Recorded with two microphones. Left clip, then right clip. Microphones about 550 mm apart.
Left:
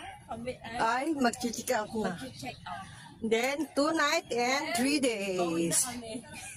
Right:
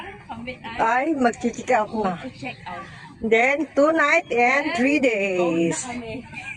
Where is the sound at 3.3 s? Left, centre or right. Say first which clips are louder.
Right 11 dB; left.